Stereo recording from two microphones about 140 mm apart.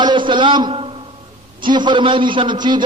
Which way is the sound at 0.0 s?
35° right (ahead or behind).